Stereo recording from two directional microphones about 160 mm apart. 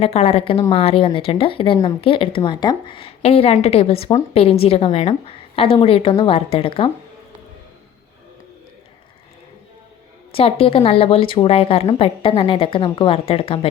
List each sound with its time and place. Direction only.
0.0 s a woman's voice: 40° left (ahead or behind)
10.3 s a woman's voice: 35° left (ahead or behind)